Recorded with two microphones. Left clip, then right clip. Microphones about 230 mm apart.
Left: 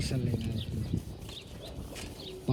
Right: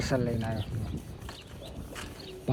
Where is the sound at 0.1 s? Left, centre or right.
Right.